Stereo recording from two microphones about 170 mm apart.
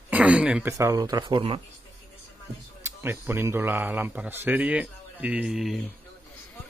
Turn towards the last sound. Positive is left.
turn(degrees=0)  # may be behind; listen again after turning